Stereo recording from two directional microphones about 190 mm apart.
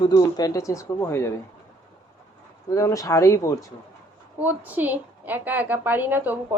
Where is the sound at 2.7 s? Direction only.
15° left (ahead or behind).